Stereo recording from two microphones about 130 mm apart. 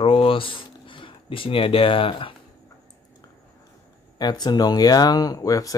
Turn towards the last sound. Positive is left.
turn(degrees=25)  # may be behind; listen again after turning